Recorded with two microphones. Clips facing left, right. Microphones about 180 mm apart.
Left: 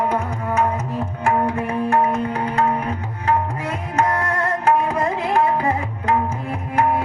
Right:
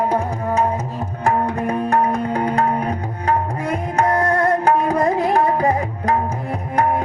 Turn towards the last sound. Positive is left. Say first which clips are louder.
# right 1 dB
turn(degrees=-35)  # may be behind; listen again after turning